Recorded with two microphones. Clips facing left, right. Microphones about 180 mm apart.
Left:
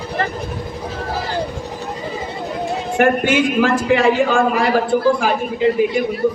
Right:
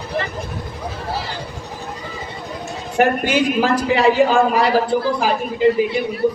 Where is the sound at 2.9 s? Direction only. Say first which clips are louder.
Left 1 dB; 50° left (ahead or behind).